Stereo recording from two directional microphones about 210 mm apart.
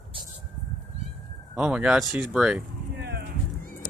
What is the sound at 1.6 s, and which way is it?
Speech, 5° right (ahead or behind).